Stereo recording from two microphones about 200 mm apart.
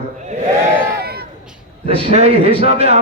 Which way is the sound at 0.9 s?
50° right (ahead or behind).